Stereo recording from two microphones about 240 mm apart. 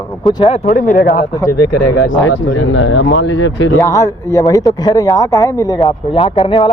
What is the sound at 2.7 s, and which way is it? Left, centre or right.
Speech, left.